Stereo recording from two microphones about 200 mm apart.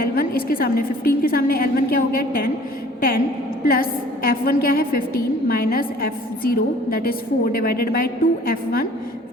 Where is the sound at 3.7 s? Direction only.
45° left (ahead or behind).